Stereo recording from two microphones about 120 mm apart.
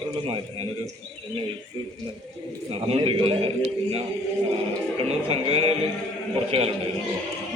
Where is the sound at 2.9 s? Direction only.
50° right (ahead or behind).